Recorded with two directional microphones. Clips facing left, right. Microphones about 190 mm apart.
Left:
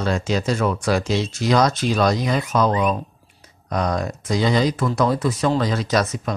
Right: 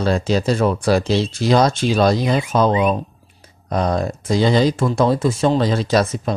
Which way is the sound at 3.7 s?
30° right (ahead or behind).